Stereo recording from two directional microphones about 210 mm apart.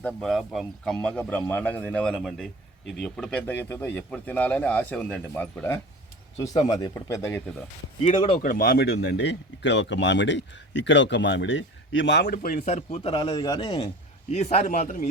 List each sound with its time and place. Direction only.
0.0 s a man's voice: centre (ahead or behind)
8.3 s speech: 40° left (ahead or behind)